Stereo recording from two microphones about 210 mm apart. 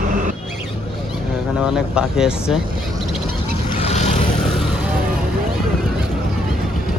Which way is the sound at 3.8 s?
30° left (ahead or behind).